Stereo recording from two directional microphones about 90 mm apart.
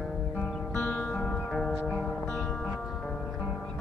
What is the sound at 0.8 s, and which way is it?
Music, 20° left (ahead or behind).